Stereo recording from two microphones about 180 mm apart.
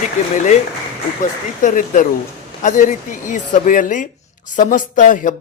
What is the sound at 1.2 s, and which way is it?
Speech, 45° left (ahead or behind).